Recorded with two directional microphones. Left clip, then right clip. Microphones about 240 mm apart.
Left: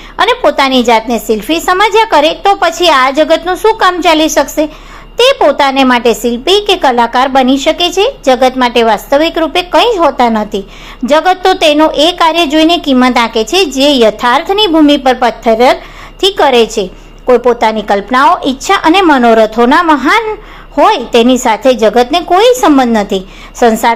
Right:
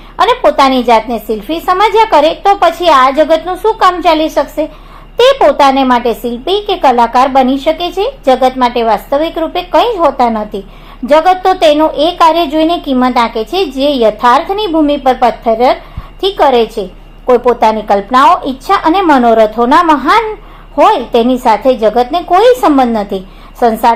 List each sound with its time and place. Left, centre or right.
0.2 s a woman's voice: left